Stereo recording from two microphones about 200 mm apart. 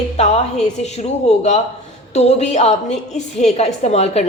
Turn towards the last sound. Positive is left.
turn(degrees=35)  # may be behind; listen again after turning